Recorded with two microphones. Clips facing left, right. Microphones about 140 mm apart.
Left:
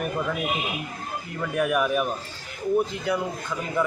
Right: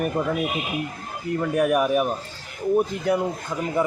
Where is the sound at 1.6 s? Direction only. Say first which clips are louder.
Right 2 dB; 40° right (ahead or behind).